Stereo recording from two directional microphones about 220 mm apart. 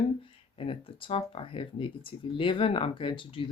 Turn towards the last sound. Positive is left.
turn(degrees=25)  # may be behind; listen again after turning